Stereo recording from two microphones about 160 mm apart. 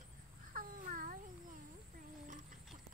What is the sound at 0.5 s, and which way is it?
Cat, 60° right (ahead or behind).